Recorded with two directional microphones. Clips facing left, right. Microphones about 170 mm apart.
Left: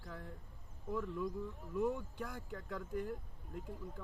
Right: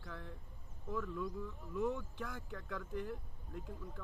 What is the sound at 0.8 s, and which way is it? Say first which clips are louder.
Speech: left 1 dB; 15° left (ahead or behind).